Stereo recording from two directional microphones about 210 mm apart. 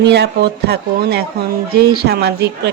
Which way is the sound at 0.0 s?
55° right (ahead or behind).